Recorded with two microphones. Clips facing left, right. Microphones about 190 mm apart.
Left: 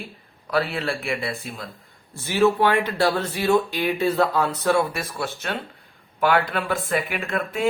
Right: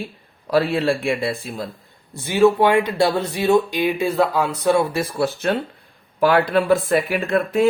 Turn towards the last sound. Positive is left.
turn(degrees=-40)  # may be behind; listen again after turning